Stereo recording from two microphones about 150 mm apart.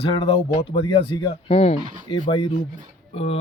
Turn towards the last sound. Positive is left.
turn(degrees=40)  # may be behind; listen again after turning